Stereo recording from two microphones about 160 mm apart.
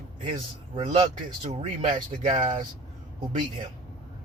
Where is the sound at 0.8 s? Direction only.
35° right (ahead or behind).